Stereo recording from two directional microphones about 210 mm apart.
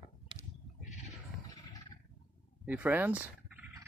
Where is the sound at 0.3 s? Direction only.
25° right (ahead or behind).